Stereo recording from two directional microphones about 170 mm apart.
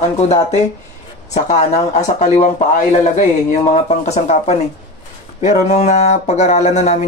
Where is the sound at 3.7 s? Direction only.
40° left (ahead or behind).